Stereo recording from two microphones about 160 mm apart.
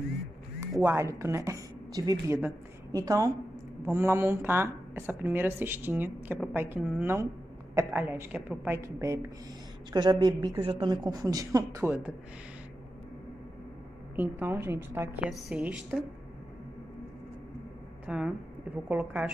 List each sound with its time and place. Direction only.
0.6 s a woman's voice: 15° right (ahead or behind)
14.1 s speech: 15° right (ahead or behind)
15.2 s a woman's voice: centre (ahead or behind)
18.0 s speech: 5° right (ahead or behind)